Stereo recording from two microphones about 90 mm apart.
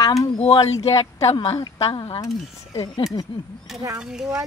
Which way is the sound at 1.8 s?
90° left.